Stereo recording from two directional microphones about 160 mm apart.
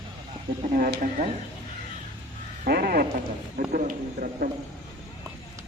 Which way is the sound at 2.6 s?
65° right (ahead or behind).